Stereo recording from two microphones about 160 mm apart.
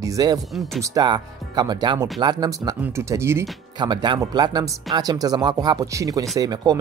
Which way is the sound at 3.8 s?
30° right (ahead or behind).